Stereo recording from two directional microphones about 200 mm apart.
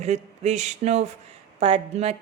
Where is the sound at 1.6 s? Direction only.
30° right (ahead or behind).